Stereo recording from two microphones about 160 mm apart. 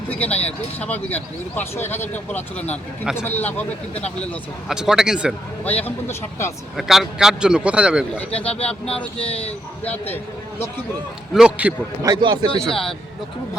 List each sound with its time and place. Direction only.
0.1 s speech: 10° left (ahead or behind)
4.7 s a man's voice: 5° right (ahead or behind)
5.6 s speech: 10° left (ahead or behind)
6.7 s a man's voice: centre (ahead or behind)
8.1 s speech: 10° left (ahead or behind)
9.1 s a man's voice: 40° left (ahead or behind)
9.8 s speech: 10° left (ahead or behind)
11.3 s a man's voice: 5° right (ahead or behind)
12.0 s speech: 25° right (ahead or behind)
12.6 s a man's voice: 5° left (ahead or behind)